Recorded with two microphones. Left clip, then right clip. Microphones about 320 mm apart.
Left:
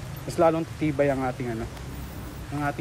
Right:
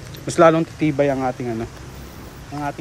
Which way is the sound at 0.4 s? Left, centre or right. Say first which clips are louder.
Right 8 dB; right.